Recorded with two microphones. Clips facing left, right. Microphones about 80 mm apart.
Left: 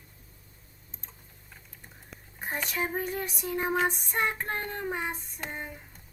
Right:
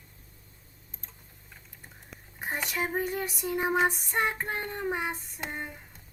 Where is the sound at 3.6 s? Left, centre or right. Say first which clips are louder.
Right 2 dB; centre.